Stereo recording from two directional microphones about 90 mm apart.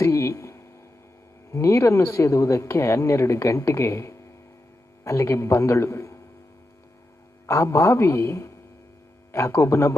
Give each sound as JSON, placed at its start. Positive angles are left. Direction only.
{"t": 0.0, "sound": "a sound", "side_deg": 35}
{"t": 1.5, "sound": "speech", "side_deg": 35}
{"t": 7.4, "sound": "speech", "side_deg": 35}